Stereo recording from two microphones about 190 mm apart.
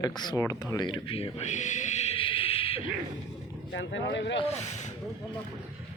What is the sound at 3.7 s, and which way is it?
Speech, 75° left (ahead or behind).